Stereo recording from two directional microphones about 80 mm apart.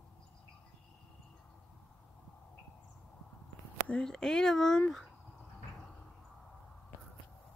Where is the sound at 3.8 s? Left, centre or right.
Centre.